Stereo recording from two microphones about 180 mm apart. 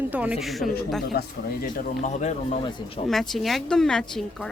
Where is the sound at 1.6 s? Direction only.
45° left (ahead or behind).